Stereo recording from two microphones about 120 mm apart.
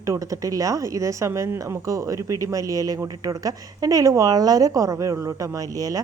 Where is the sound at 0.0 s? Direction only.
25° right (ahead or behind).